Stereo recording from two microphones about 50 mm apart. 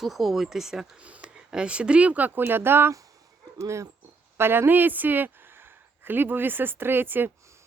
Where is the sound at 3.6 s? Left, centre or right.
Right.